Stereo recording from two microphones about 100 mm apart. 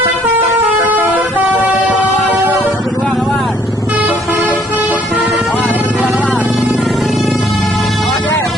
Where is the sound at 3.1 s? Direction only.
5° left (ahead or behind).